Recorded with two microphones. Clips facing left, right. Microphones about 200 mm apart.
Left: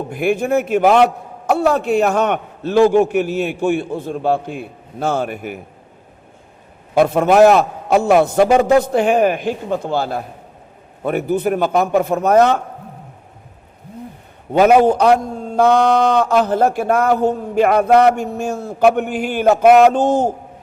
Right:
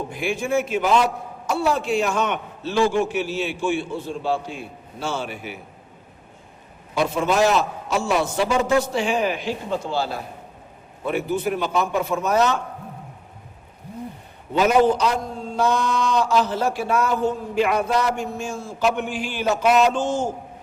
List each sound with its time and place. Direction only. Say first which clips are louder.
0.1 s a man's voice: left 8 dB; 60° left (ahead or behind)
6.9 s a man's voice: left 8 dB; 60° left (ahead or behind)
14.5 s a man's voice: left 6 dB; 60° left (ahead or behind)